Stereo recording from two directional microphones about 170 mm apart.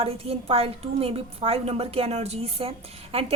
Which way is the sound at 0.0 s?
35° right (ahead or behind).